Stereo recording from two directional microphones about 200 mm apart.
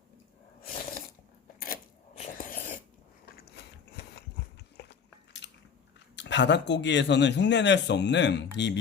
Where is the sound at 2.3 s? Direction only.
45° left (ahead or behind).